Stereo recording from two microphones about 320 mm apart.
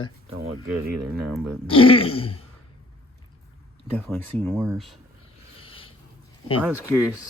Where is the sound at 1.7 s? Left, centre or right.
Centre.